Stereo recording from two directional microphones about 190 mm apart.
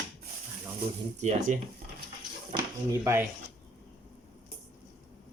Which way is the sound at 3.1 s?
15° right (ahead or behind).